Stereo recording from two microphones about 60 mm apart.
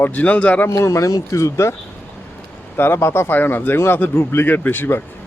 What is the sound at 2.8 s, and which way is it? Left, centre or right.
Speech, left.